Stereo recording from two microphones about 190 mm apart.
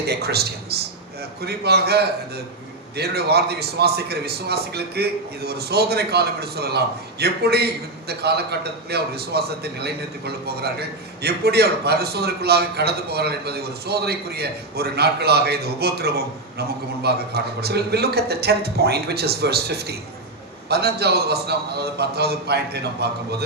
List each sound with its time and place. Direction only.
0.0 s a man's voice: 60° right (ahead or behind)